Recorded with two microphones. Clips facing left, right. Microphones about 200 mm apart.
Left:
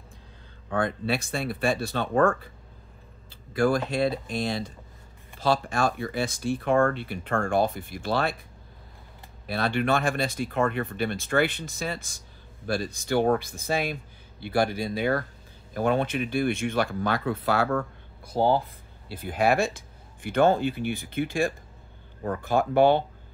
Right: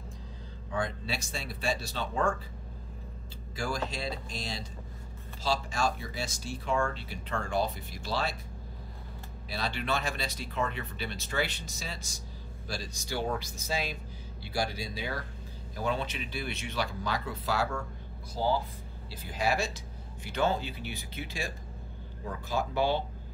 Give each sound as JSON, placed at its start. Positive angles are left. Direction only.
{"t": 0.7, "sound": "speech", "side_deg": 55}
{"t": 3.5, "sound": "speech", "side_deg": 55}
{"t": 9.5, "sound": "speech", "side_deg": 55}